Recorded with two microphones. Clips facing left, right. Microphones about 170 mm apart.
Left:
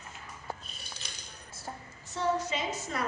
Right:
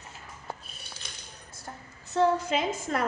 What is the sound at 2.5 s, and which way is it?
Speech, 55° right (ahead or behind).